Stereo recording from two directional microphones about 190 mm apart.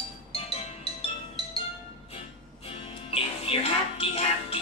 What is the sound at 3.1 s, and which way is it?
Music, 30° left (ahead or behind).